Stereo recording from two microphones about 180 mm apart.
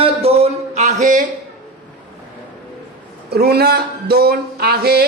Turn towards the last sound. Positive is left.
turn(degrees=-60)  # may be behind; listen again after turning